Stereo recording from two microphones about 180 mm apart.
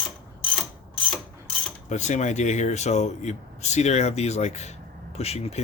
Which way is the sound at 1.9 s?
40° left (ahead or behind).